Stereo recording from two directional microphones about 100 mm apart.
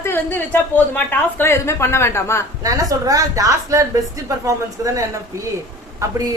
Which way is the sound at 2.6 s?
35° right (ahead or behind).